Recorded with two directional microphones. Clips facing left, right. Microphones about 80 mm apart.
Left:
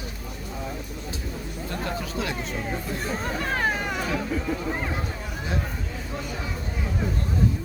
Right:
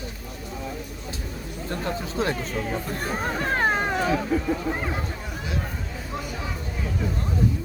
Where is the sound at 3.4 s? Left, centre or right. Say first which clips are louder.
Right 4 dB; right.